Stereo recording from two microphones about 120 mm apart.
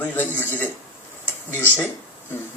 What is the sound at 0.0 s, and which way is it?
Speech, 15° left (ahead or behind).